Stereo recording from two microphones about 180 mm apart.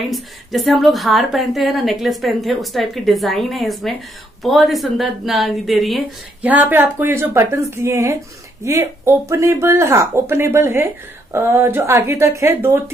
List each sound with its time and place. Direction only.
0.1 s a woman's voice: centre (ahead or behind)